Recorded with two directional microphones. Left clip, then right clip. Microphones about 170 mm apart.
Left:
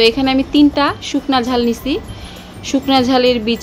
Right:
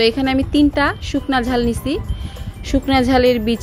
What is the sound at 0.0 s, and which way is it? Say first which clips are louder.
Speech: left 3 dB; 35° right (ahead or behind).